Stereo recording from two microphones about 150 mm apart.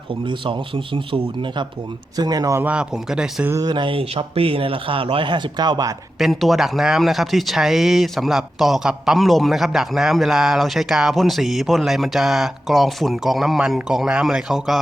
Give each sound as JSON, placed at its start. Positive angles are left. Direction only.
{"t": 0.9, "sound": "speech", "side_deg": -35}
{"t": 2.6, "sound": "speech", "side_deg": -10}
{"t": 3.5, "sound": "speech", "side_deg": -30}
{"t": 6.1, "sound": "speech", "side_deg": 0}